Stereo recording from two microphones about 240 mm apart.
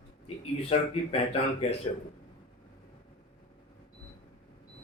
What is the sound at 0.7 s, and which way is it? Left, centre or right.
Speech, left.